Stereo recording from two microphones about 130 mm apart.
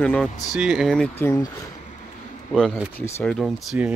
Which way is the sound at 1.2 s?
20° left (ahead or behind).